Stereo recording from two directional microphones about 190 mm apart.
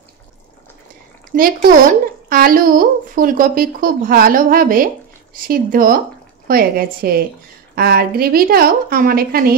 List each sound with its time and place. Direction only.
1.3 s speech: 50° right (ahead or behind)